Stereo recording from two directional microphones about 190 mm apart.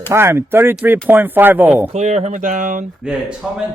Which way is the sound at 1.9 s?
35° right (ahead or behind).